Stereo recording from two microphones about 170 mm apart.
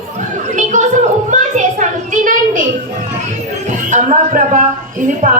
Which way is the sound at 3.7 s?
45° right (ahead or behind).